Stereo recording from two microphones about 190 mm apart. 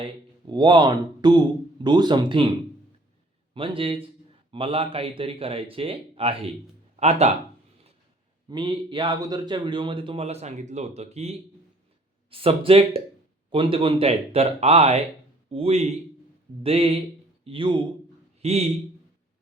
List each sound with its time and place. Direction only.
0.4 s speech: 25° right (ahead or behind)
3.5 s speech: 30° right (ahead or behind)
8.4 s a man's voice: 25° right (ahead or behind)